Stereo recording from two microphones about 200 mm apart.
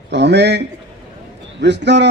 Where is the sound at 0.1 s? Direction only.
60° right (ahead or behind).